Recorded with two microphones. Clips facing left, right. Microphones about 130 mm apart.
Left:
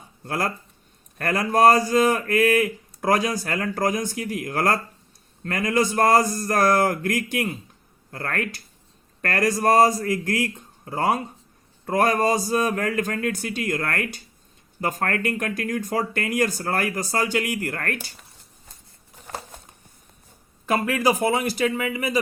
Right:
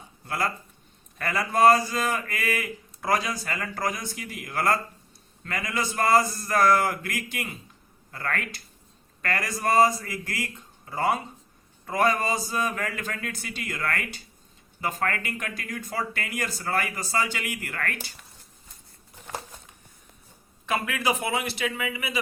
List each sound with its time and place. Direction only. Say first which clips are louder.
0.3 s speech: left 3 dB; 50° left (ahead or behind)
20.7 s a man's voice: left 5 dB; 40° left (ahead or behind)